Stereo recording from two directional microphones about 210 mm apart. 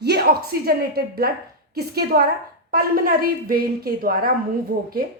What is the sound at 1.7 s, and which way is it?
A woman's voice, 50° right (ahead or behind).